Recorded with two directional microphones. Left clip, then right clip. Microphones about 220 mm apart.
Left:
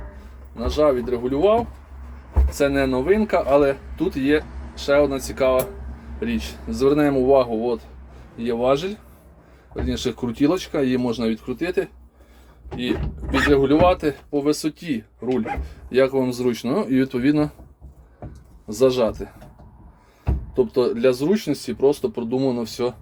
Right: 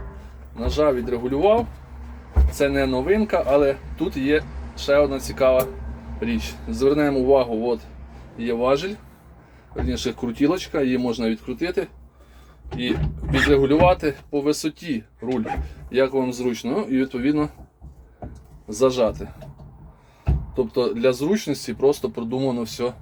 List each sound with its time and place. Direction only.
0.5 s speech: 10° left (ahead or behind); by 17.5 s 25° left (ahead or behind)
18.7 s speech: 20° left (ahead or behind)
20.6 s speech: 15° left (ahead or behind)